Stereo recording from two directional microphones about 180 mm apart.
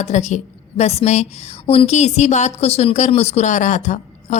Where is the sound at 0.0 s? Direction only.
40° left (ahead or behind).